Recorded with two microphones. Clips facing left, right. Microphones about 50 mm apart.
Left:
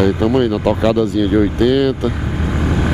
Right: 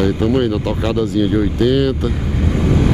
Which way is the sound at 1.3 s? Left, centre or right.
Centre.